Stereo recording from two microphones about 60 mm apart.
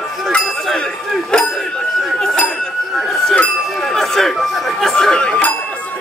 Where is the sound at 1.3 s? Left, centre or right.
Centre.